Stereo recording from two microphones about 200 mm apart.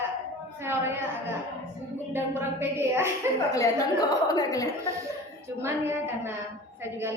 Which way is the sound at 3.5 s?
15° left (ahead or behind).